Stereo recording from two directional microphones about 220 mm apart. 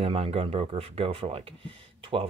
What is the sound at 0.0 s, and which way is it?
Speech, 25° right (ahead or behind).